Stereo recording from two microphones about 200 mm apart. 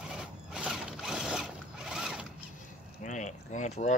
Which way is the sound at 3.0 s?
40° left (ahead or behind).